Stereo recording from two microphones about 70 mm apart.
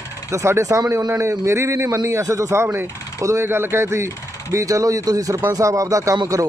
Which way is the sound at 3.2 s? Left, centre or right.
Right.